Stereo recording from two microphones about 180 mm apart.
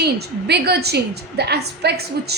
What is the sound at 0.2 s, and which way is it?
A woman's voice, 65° right (ahead or behind).